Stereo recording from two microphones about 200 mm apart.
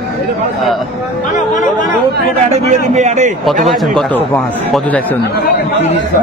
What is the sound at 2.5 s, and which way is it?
Speech, 35° right (ahead or behind).